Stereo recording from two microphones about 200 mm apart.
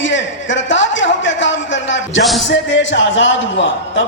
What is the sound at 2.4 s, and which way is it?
A man's voice, 65° left (ahead or behind).